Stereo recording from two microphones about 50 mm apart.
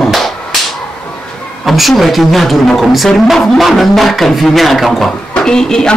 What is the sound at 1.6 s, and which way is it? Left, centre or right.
Speech, centre.